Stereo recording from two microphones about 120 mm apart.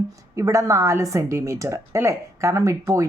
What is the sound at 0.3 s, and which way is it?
A woman's voice, 25° right (ahead or behind).